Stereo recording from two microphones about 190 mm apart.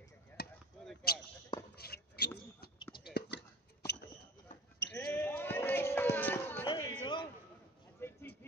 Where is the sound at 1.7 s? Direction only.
55° left (ahead or behind).